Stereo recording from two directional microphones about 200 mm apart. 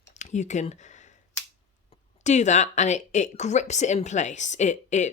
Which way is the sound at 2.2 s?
35° left (ahead or behind).